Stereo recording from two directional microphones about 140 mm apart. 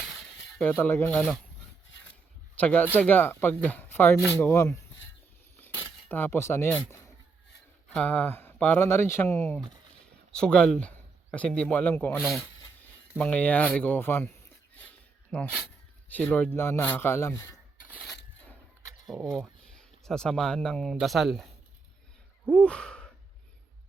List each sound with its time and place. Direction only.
0.6 s speech: 15° left (ahead or behind)
2.6 s speech: 10° left (ahead or behind)
5.5 s a sound: 15° left (ahead or behind)
7.9 s speech: 10° left (ahead or behind)
15.3 s speech: 10° left (ahead or behind)
17.9 s a sound: centre (ahead or behind)
19.0 s speech: centre (ahead or behind)
22.4 s sigh: 5° left (ahead or behind)